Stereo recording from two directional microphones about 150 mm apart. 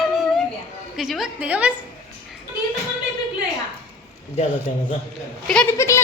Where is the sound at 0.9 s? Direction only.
Centre (ahead or behind).